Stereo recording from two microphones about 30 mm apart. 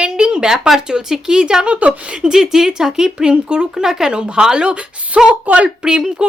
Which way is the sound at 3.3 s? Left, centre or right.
Right.